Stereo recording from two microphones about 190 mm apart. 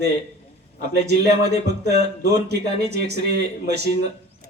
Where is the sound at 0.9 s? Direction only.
60° right (ahead or behind).